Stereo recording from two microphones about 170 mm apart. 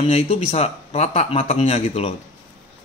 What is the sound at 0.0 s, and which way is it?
A man's voice, 40° left (ahead or behind).